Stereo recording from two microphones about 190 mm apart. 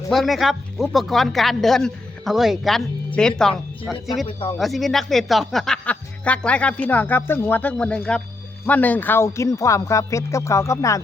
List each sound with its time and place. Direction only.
0.1 s speech: centre (ahead or behind)
4.3 s speech: 25° left (ahead or behind)
4.5 s speech: centre (ahead or behind); by 11.0 s 15° left (ahead or behind)